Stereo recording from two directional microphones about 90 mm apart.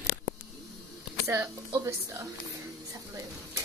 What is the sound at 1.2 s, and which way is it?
Speech, 30° right (ahead or behind).